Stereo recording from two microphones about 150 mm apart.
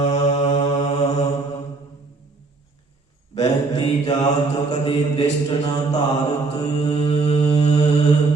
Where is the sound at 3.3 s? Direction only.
30° left (ahead or behind).